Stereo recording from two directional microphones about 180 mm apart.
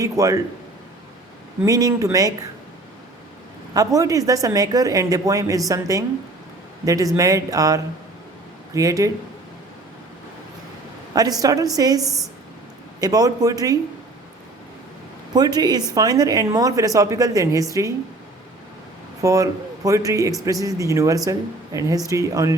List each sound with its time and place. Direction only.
0.0 s speech: 20° right (ahead or behind)
1.6 s speech: 20° right (ahead or behind)
3.8 s speech: 20° right (ahead or behind)
11.1 s speech: 20° right (ahead or behind)
15.3 s speech: 20° right (ahead or behind)
19.2 s speech: 20° right (ahead or behind)